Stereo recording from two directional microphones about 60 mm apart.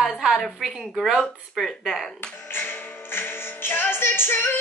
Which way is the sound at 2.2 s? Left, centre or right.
Left.